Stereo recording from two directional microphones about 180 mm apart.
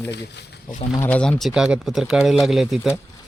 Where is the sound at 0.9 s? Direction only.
10° left (ahead or behind).